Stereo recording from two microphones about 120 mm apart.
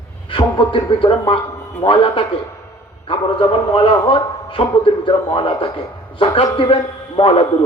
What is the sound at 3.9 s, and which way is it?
A man's voice, 40° left (ahead or behind).